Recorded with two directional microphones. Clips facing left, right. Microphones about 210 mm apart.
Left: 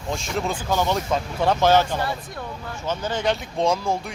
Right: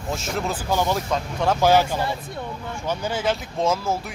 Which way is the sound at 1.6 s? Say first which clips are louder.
Right 1 dB; 10° right (ahead or behind).